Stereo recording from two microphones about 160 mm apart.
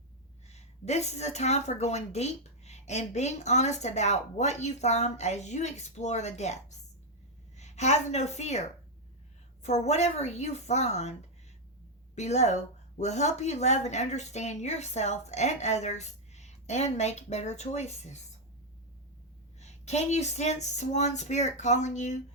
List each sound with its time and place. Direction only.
0.4 s a woman's voice: 45° left (ahead or behind)
9.6 s a woman's voice: 45° left (ahead or behind)
12.1 s a woman's voice: 45° left (ahead or behind)
19.5 s a woman's voice: 45° left (ahead or behind)